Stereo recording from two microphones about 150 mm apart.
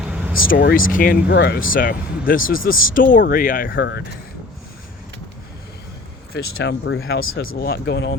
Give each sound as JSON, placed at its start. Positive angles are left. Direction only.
{"t": 0.0, "sound": "vehicle", "side_deg": -5}
{"t": 0.3, "sound": "speech", "side_deg": 75}
{"t": 6.3, "sound": "speech", "side_deg": 90}